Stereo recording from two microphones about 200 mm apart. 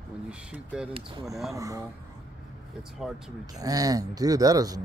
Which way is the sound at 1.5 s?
15° right (ahead or behind).